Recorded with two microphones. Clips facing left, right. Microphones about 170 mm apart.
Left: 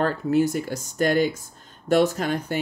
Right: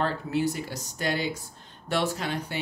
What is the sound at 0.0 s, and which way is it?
Speech, 45° left (ahead or behind).